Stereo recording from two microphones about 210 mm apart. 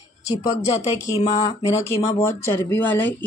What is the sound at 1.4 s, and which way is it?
Speech, 20° left (ahead or behind).